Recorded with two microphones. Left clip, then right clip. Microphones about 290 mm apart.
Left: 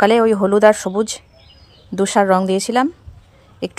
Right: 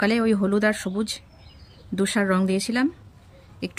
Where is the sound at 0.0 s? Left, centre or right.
Left.